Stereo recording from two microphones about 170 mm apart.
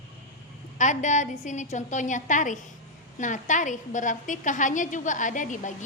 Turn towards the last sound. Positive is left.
turn(degrees=50)  # may be behind; listen again after turning